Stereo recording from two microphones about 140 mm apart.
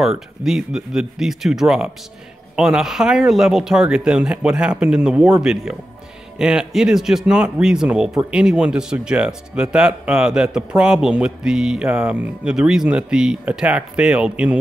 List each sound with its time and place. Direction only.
0.4 s speech: 5° right (ahead or behind)